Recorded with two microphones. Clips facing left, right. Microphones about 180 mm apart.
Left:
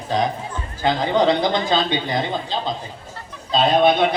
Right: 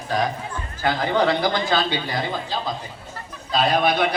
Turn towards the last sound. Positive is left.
turn(degrees=25)  # may be behind; listen again after turning